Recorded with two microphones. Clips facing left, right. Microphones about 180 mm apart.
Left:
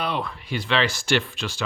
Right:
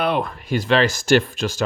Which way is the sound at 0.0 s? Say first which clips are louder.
Right 6 dB; 50° right (ahead or behind).